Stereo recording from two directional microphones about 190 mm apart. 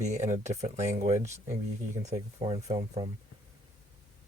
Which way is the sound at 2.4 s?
25° right (ahead or behind).